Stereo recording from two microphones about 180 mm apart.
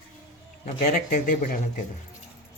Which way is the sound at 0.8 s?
50° left (ahead or behind).